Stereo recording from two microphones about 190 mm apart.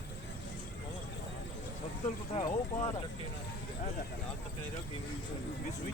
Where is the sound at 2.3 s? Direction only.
35° left (ahead or behind).